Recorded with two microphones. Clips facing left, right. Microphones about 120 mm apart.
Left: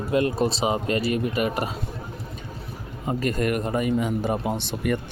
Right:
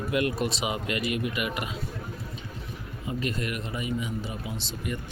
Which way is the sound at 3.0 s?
45° left (ahead or behind).